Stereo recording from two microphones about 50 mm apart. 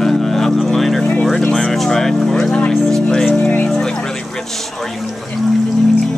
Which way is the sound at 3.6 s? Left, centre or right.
Centre.